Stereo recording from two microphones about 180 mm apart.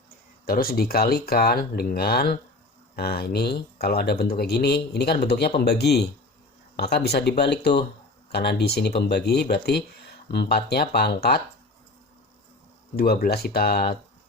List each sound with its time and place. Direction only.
0.4 s speech: 55° left (ahead or behind)
13.0 s speech: 60° left (ahead or behind)